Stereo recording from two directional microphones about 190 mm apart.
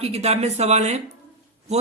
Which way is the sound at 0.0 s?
35° right (ahead or behind).